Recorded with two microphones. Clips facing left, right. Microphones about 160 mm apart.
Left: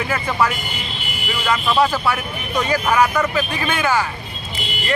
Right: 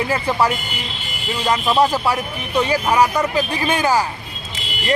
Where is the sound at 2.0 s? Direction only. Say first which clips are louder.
Right 1 dB; 30° right (ahead or behind).